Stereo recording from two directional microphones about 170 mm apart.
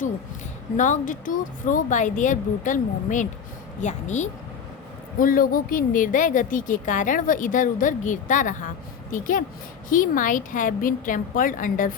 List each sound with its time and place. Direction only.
0.8 s speech: 50° left (ahead or behind)
5.2 s speech: 55° left (ahead or behind)